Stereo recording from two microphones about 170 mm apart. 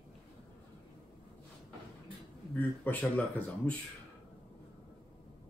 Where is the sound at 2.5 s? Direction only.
10° left (ahead or behind).